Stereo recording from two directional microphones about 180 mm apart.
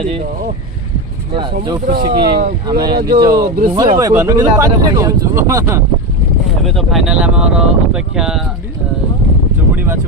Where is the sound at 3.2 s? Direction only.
20° right (ahead or behind).